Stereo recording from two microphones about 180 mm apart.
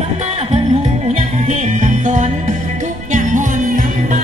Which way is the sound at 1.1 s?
40° right (ahead or behind).